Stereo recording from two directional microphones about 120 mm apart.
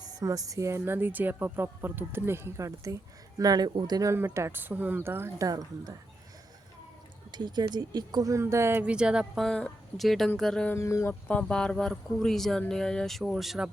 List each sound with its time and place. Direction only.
0.0 s speech: 30° right (ahead or behind)
4.1 s speech: 20° right (ahead or behind)
5.5 s speech: 30° right (ahead or behind)
7.3 s speech: 40° right (ahead or behind); by 8.8 s 20° right (ahead or behind)
8.8 s speech: 10° right (ahead or behind)
10.7 s speech: 25° left (ahead or behind)
11.1 s speech: 10° left (ahead or behind)